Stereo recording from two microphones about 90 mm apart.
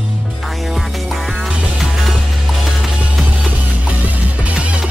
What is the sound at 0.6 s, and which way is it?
Music, centre (ahead or behind).